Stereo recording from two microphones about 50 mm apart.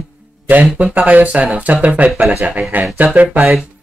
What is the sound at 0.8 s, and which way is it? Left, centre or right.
A man's voice, right.